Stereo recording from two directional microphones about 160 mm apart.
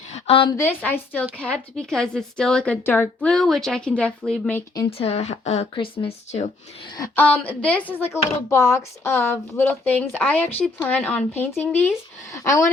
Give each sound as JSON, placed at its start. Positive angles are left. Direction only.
{"t": 0.1, "sound": "a sound", "side_deg": 35}
{"t": 0.5, "sound": "a woman's voice", "side_deg": 15}
{"t": 4.9, "sound": "speech", "side_deg": 40}
{"t": 7.2, "sound": "speech", "side_deg": 10}